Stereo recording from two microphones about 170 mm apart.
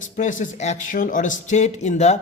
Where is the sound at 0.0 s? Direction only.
50° left (ahead or behind).